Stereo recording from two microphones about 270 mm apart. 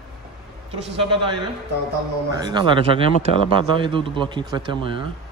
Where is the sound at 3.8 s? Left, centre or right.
Centre.